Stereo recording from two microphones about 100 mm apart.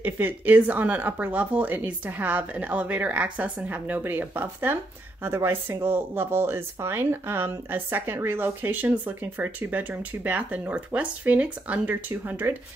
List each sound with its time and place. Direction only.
0.0 s speech: 15° right (ahead or behind)